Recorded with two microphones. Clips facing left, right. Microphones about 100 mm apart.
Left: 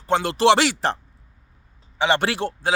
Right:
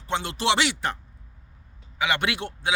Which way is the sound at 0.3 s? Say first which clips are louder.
Left 7 dB; 45° left (ahead or behind).